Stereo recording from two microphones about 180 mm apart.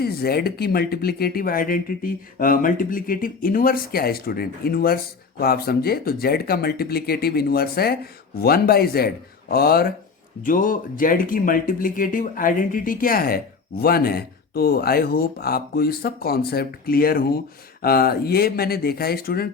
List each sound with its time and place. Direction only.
0.0 s speech: 60° left (ahead or behind)